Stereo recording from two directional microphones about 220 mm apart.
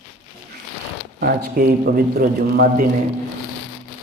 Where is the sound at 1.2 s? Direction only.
45° right (ahead or behind).